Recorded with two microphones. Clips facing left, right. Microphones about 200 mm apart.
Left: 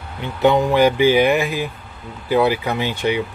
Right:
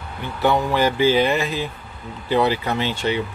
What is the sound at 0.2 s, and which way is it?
Speech, 20° left (ahead or behind).